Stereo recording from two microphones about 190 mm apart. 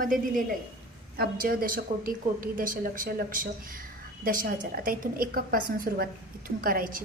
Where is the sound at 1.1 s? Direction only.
50° right (ahead or behind).